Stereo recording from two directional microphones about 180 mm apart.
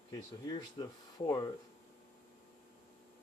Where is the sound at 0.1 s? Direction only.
20° left (ahead or behind).